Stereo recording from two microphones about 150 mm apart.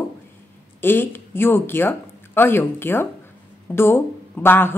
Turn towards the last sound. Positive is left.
turn(degrees=15)  # may be behind; listen again after turning